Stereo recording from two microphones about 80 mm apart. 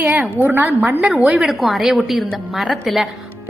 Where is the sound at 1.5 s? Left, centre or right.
Centre.